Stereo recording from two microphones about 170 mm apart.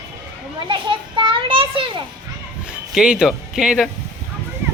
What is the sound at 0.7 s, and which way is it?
Children playing, 30° right (ahead or behind).